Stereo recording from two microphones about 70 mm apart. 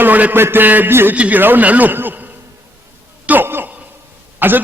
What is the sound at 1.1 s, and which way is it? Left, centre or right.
A man's voice, centre.